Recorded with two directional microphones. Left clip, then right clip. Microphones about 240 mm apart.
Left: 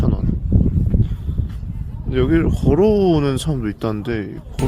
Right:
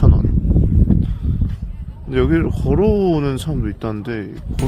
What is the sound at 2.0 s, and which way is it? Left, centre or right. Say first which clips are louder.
Speech: right 1 dB; centre.